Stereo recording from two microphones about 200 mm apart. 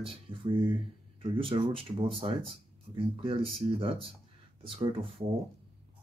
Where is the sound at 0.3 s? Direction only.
25° right (ahead or behind).